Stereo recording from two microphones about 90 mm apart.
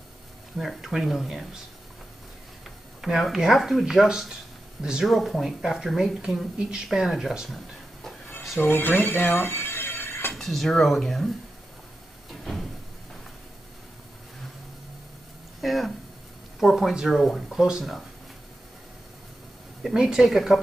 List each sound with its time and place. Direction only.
0.6 s speech: 5° right (ahead or behind)
3.0 s speech: centre (ahead or behind)
8.5 s speech: 20° left (ahead or behind)
10.3 s speech: centre (ahead or behind)
12.3 s cupboard open or close: centre (ahead or behind)
15.6 s speech: centre (ahead or behind)
19.8 s speech: 5° right (ahead or behind)